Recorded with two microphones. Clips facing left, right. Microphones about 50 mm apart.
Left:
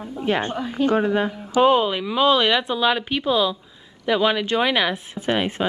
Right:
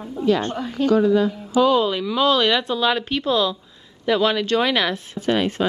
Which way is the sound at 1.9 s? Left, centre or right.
Centre.